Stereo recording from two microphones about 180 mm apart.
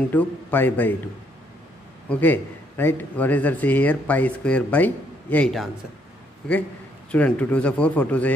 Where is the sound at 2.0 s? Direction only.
10° left (ahead or behind).